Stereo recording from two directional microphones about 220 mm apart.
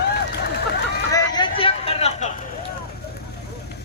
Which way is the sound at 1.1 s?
20° left (ahead or behind).